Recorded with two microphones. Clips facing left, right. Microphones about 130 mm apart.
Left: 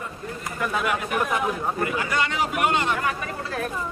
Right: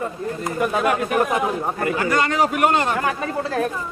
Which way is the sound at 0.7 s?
40° right (ahead or behind).